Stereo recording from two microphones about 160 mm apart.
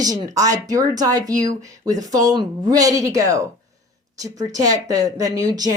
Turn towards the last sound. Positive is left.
turn(degrees=-25)  # may be behind; listen again after turning